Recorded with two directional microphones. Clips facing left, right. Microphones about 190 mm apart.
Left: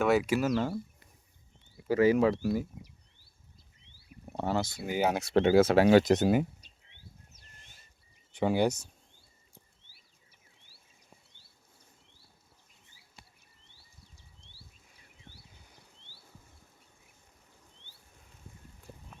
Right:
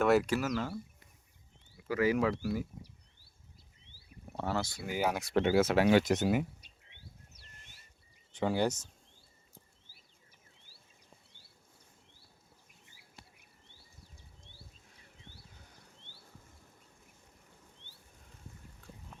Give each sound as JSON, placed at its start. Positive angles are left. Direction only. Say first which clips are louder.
{"t": 0.0, "sound": "speech", "louder": "left 1 dB", "side_deg": 0}
{"t": 0.3, "sound": "speech", "louder": "left 5 dB", "side_deg": 30}
{"t": 1.9, "sound": "speech", "louder": "left 5 dB", "side_deg": 25}
{"t": 4.4, "sound": "speech", "louder": "left 4 dB", "side_deg": 20}
{"t": 8.3, "sound": "speech", "louder": "left 4 dB", "side_deg": 15}